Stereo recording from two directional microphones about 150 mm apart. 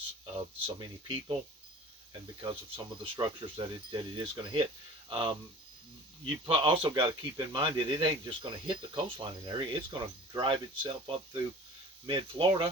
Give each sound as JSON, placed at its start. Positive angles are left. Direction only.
{"t": 0.3, "sound": "speech", "side_deg": -30}
{"t": 2.4, "sound": "speech", "side_deg": -35}
{"t": 6.4, "sound": "speech", "side_deg": -35}